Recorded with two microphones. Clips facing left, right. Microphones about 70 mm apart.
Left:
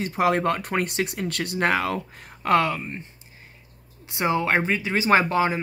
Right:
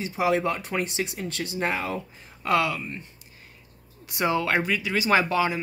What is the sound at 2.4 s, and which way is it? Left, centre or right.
Speech, left.